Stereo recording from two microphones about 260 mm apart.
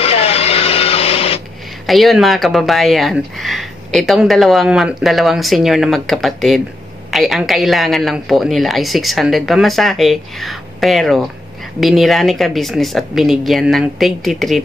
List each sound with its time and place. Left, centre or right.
0.0 s printer: left
1.9 s speech: centre